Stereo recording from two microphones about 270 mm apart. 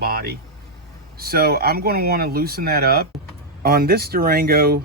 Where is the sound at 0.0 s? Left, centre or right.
Right.